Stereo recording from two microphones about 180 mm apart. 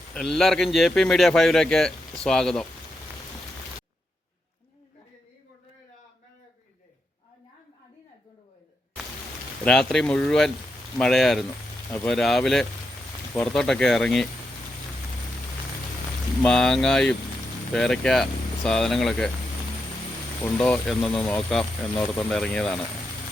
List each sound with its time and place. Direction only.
0.1 s a man's voice: centre (ahead or behind)
9.6 s a man's voice: 5° left (ahead or behind)
16.4 s a man's voice: 5° left (ahead or behind)
20.4 s a man's voice: 5° left (ahead or behind)